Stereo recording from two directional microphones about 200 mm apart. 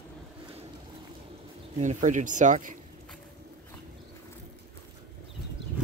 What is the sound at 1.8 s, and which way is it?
Speech, 40° right (ahead or behind).